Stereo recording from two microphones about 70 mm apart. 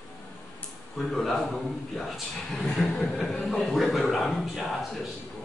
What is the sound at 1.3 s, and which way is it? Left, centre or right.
A man's voice, centre.